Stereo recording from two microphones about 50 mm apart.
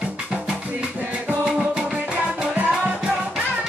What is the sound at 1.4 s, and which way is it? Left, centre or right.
Music, centre.